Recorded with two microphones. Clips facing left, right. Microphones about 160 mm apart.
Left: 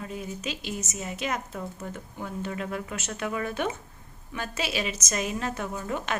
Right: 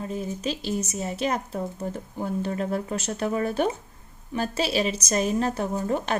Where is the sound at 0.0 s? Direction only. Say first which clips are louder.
Right 5 dB; 35° right (ahead or behind).